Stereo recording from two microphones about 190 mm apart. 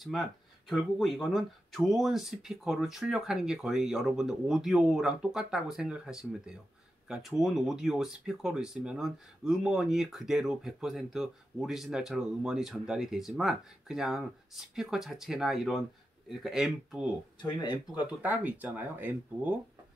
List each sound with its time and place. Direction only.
0.0 s speech: centre (ahead or behind)
17.4 s speech: 25° left (ahead or behind)
18.2 s speech: 10° right (ahead or behind)